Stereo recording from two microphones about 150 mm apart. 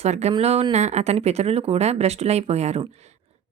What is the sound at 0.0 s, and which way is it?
A woman's voice, 45° right (ahead or behind).